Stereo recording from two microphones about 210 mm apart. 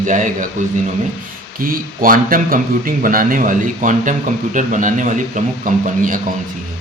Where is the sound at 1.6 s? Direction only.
40° right (ahead or behind).